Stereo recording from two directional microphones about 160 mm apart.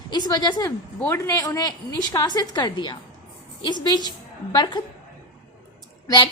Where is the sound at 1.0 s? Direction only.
15° left (ahead or behind).